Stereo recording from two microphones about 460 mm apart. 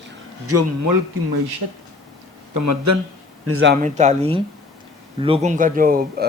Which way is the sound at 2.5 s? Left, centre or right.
Right.